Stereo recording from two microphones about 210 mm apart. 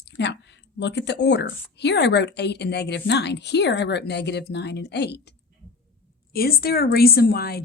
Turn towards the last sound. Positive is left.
turn(degrees=45)  # may be behind; listen again after turning